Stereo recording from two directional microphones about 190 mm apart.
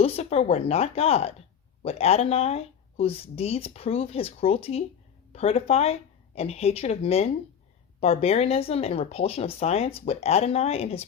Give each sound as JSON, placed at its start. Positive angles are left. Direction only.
{"t": 0.0, "sound": "a woman's voice", "side_deg": 35}